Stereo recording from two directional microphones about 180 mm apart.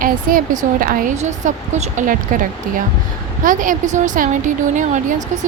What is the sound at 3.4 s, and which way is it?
Speech, 45° right (ahead or behind).